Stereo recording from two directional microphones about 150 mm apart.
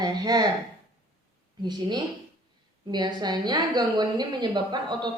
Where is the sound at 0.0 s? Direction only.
25° right (ahead or behind).